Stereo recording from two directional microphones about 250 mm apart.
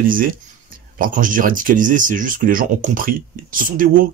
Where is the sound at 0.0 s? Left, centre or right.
Right.